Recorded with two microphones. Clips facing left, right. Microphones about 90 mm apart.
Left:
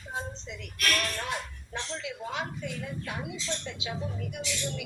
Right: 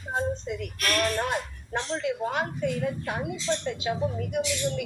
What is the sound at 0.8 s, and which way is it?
A woman's voice, 50° right (ahead or behind).